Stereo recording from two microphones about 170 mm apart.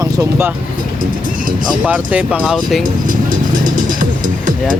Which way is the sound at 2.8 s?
55° right (ahead or behind).